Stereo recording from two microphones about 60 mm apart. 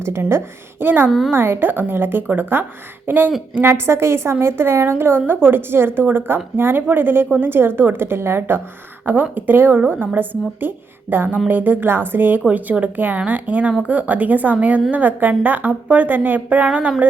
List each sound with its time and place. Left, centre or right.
0.0 s a woman's voice: right